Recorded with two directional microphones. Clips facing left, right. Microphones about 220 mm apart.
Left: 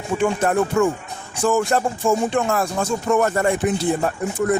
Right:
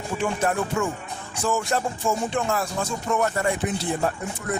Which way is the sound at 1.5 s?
55° left (ahead or behind).